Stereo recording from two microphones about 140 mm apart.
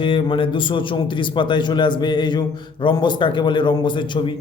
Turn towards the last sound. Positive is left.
turn(degrees=35)  # may be behind; listen again after turning